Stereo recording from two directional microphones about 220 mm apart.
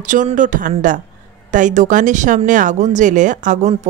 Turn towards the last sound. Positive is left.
turn(degrees=-35)  # may be behind; listen again after turning